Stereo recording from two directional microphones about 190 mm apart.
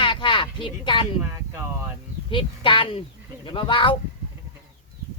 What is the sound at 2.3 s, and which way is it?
Speech, 25° left (ahead or behind).